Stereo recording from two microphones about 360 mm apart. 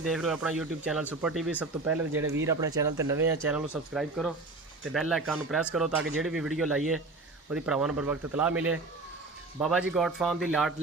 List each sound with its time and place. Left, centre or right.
0.0 s speech: centre